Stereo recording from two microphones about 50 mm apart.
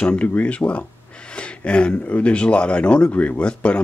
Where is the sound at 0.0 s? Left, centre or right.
Left.